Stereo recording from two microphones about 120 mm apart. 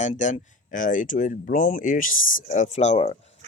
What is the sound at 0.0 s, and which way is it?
Speech, 80° left.